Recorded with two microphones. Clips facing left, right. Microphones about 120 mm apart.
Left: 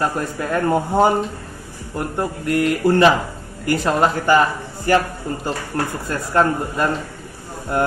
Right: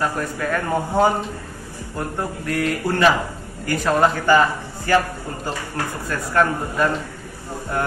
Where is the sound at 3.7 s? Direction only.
20° left (ahead or behind).